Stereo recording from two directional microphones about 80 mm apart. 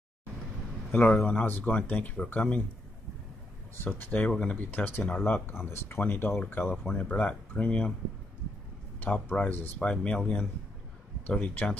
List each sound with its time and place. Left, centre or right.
1.2 s speech: left
3.7 s speech: left
4.3 s speech: centre
4.6 s speech: left
9.0 s speech: centre